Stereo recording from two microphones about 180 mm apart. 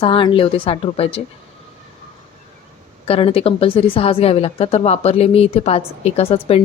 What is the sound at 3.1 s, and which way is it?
A woman's voice, 30° left (ahead or behind).